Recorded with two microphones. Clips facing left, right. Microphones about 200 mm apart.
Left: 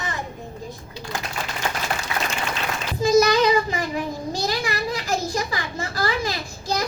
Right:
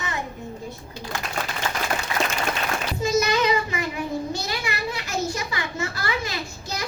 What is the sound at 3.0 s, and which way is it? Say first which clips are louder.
Child singing: left 5 dB; 35° left (ahead or behind).